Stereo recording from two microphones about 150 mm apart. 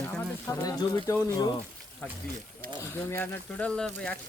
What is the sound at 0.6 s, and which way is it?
Speech, 20° left (ahead or behind).